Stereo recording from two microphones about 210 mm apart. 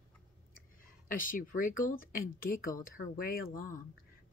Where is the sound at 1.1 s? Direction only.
40° left (ahead or behind).